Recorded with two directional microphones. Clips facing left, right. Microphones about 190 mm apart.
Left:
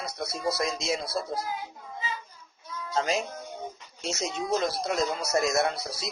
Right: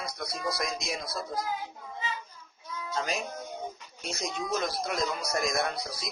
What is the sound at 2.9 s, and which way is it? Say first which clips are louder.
Speech: left 5 dB; 30° left (ahead or behind).